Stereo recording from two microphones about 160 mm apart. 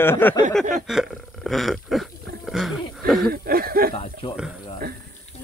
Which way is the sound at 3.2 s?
70° right (ahead or behind).